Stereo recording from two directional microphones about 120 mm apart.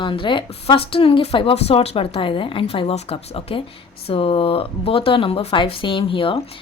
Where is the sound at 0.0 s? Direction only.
45° left (ahead or behind).